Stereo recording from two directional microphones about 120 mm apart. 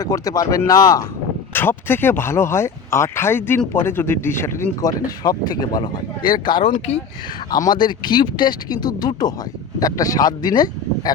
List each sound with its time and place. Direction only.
0.0 s speech: 30° left (ahead or behind)
1.5 s speech: 15° left (ahead or behind); by 11.1 s 35° left (ahead or behind)